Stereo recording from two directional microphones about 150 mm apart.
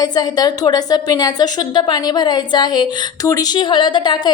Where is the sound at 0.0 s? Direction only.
25° left (ahead or behind).